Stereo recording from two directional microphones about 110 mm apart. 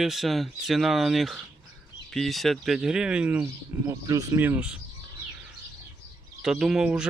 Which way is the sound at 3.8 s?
30° right (ahead or behind).